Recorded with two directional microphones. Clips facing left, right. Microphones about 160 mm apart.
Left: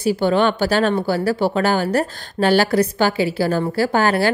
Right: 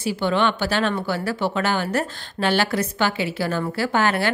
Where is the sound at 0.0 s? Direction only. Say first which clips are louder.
Left 5 dB; 40° left (ahead or behind).